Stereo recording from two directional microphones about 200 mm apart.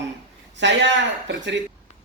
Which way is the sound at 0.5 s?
60° right (ahead or behind).